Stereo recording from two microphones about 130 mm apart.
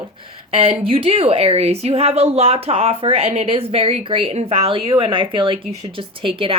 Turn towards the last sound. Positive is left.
turn(degrees=-40)  # may be behind; listen again after turning